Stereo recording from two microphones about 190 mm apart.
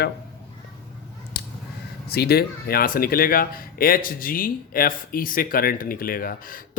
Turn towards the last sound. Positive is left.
turn(degrees=50)  # may be behind; listen again after turning